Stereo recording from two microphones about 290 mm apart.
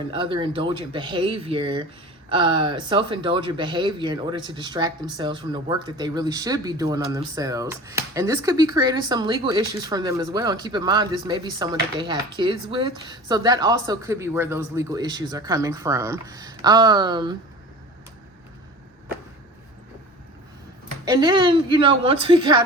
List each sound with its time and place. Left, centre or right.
0.1 s speech: centre
21.0 s speech: centre